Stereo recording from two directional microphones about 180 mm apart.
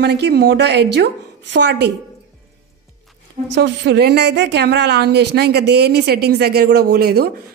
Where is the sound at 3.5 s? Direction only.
70° right (ahead or behind).